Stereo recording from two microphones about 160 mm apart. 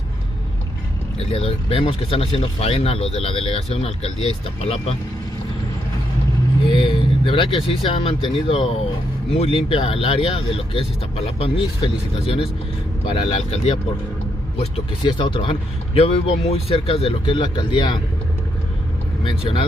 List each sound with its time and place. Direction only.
1.2 s speech: 35° left (ahead or behind)
6.7 s speech: 35° left (ahead or behind)
19.2 s speech: 30° left (ahead or behind)